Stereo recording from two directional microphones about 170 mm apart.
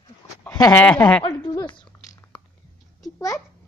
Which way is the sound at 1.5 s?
25° left (ahead or behind).